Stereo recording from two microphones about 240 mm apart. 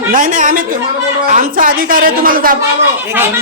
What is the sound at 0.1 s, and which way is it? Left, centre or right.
A man's voice, right.